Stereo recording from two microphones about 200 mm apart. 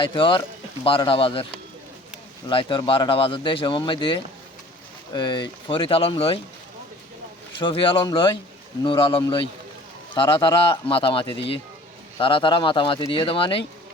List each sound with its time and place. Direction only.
0.0 s speech: 25° left (ahead or behind)
7.6 s speech: 25° left (ahead or behind)